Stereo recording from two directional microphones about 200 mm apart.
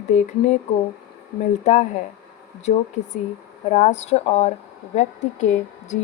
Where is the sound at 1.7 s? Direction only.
35° left (ahead or behind).